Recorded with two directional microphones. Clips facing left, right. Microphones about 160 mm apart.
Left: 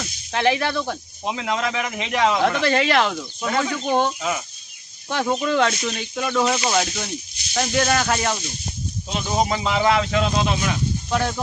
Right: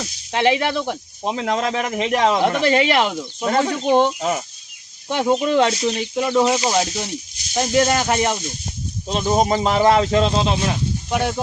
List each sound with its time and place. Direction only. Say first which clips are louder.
0.0 s speech: right 2 dB; 20° right (ahead or behind)
1.3 s speech: right 3 dB; 35° right (ahead or behind)
2.4 s speech: right 2 dB; 20° right (ahead or behind)
3.5 s speech: right 4 dB; 35° right (ahead or behind)
4.2 s speech: right 4 dB; 40° right (ahead or behind)
5.0 s speech: right 4 dB; 25° right (ahead or behind)
7.5 s speech: right 3 dB; 20° right (ahead or behind)
9.0 s speech: right 5 dB; 45° right (ahead or behind); by 10.8 s 30° right (ahead or behind)
11.1 s speech: right 2 dB; 15° right (ahead or behind)